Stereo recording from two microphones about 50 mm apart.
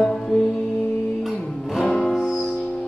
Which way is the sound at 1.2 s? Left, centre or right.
Centre.